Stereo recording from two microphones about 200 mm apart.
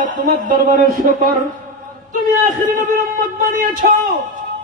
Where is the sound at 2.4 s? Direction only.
40° right (ahead or behind).